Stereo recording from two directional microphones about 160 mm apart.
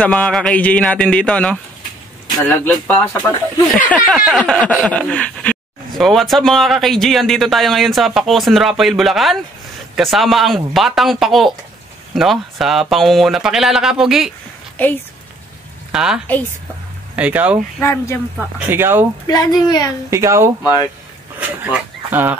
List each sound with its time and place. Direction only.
0.0 s a man's voice: 10° left (ahead or behind)
3.9 s speech: centre (ahead or behind)
14.8 s a man's voice: 10° left (ahead or behind)
15.9 s speech: 5° right (ahead or behind)
17.7 s a man's voice: 15° left (ahead or behind)
18.7 s speech: 15° right (ahead or behind)
19.2 s a woman's voice: 25° left (ahead or behind)
20.1 s speech: 20° right (ahead or behind)
20.6 s a woman's voice: 25° left (ahead or behind)
21.4 s speech: 10° right (ahead or behind)